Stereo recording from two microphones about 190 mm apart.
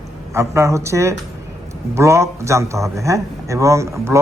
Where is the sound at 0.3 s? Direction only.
15° right (ahead or behind).